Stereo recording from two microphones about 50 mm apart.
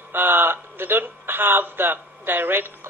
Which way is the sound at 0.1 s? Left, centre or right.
Right.